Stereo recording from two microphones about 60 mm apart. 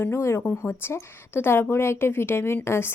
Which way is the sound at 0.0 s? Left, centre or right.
Left.